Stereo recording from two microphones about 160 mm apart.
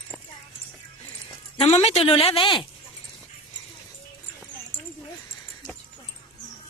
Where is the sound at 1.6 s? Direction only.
40° left (ahead or behind).